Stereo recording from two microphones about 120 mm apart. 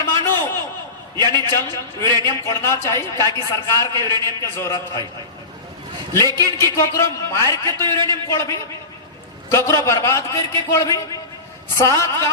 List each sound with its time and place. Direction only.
0.0 s a sound: 25° left (ahead or behind)
1.2 s a man's voice: 25° left (ahead or behind)
6.3 s a man's voice: 25° left (ahead or behind)